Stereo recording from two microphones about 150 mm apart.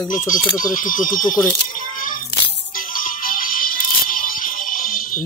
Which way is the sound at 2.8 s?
65° left (ahead or behind).